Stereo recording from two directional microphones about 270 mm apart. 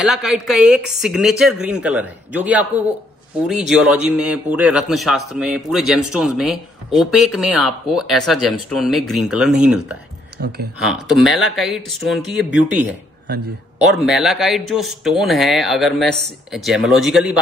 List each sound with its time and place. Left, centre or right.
0.0 s a man's voice: centre
10.4 s speech: right
10.8 s a man's voice: centre
13.9 s a man's voice: centre